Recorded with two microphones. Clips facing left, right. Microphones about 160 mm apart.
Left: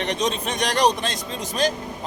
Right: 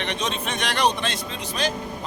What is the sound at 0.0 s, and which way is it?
Speech, 40° left (ahead or behind).